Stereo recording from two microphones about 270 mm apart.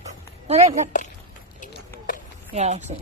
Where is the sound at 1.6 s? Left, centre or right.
Left.